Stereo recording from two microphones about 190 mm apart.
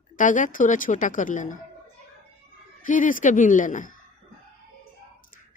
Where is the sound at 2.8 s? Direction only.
45° left (ahead or behind).